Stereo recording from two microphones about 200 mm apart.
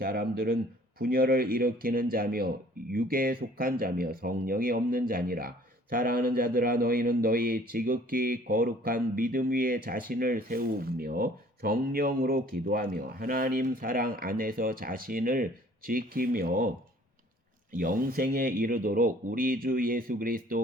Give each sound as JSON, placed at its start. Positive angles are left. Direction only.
{"t": 0.0, "sound": "a man's voice", "side_deg": -50}
{"t": 17.7, "sound": "a man's voice", "side_deg": -45}